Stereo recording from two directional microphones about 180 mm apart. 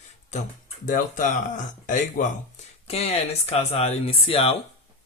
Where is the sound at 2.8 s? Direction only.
35° left (ahead or behind).